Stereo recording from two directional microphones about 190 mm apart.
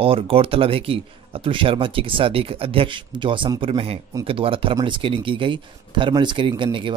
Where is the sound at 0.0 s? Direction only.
30° right (ahead or behind).